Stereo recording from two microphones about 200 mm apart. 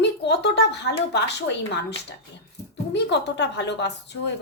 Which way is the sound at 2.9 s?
60° left (ahead or behind).